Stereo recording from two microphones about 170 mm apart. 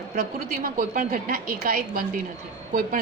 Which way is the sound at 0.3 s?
55° right (ahead or behind).